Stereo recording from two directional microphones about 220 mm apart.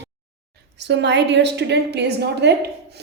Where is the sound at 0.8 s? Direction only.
50° right (ahead or behind).